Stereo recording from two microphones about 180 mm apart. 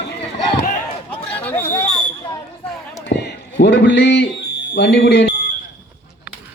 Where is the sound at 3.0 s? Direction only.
70° left (ahead or behind).